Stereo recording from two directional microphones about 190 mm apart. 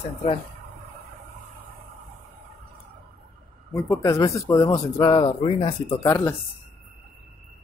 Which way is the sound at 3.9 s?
15° left (ahead or behind).